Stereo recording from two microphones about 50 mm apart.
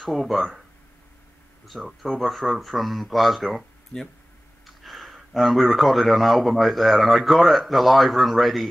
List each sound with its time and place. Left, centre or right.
0.0 s speech: centre
1.7 s speech: centre
4.6 s speech: centre